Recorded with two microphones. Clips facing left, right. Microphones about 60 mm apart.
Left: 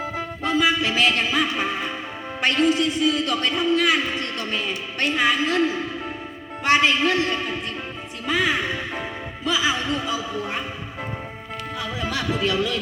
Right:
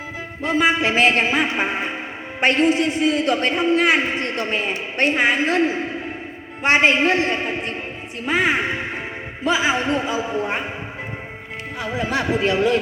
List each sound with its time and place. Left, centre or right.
0.4 s a man's voice: right
11.8 s speech: right